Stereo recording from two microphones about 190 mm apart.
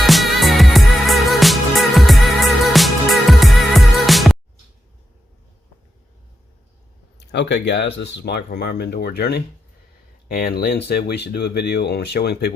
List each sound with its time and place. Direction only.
0.0 s music: centre (ahead or behind)
7.2 s speech: 65° left (ahead or behind)